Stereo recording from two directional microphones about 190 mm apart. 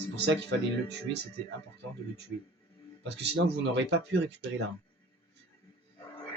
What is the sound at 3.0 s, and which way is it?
Speech, 65° right (ahead or behind).